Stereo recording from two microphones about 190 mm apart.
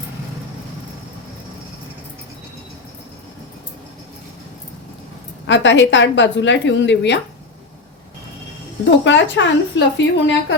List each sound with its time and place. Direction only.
5.5 s a woman's voice: 75° left (ahead or behind)
9.0 s a woman's voice: 70° left (ahead or behind)